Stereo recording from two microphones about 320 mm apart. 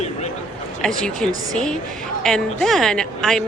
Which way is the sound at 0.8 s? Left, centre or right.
Centre.